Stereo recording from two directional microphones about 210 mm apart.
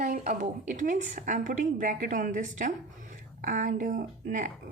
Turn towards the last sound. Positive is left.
turn(degrees=-40)  # may be behind; listen again after turning